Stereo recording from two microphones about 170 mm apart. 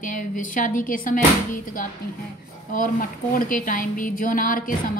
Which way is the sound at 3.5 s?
50° left (ahead or behind).